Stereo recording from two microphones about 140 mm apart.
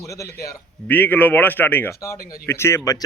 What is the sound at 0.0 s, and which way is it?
Speech, 20° left (ahead or behind).